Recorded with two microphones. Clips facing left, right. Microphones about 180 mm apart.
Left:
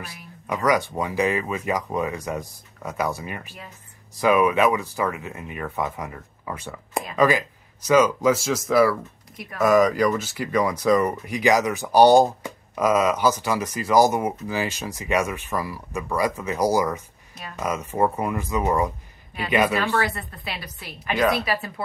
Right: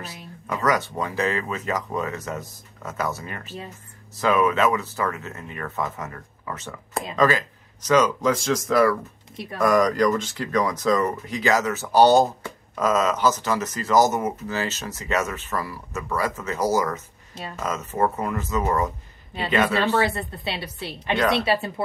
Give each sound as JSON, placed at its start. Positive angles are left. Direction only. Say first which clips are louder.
{"t": 0.5, "sound": "speech", "louder": "left 2 dB", "side_deg": 15}
{"t": 17.3, "sound": "speech", "louder": "right 4 dB", "side_deg": -30}
{"t": 17.6, "sound": "speech", "louder": "left 2 dB", "side_deg": 10}
{"t": 20.0, "sound": "a woman's voice", "louder": "right 3 dB", "side_deg": -25}